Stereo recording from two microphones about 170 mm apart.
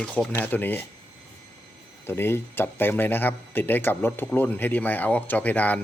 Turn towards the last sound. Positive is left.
turn(degrees=10)  # may be behind; listen again after turning